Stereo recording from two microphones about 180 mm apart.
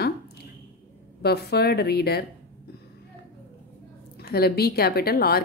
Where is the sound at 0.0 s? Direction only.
60° left (ahead or behind).